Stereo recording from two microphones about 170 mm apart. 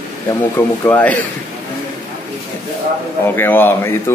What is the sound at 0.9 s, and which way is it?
Speech, 10° left (ahead or behind).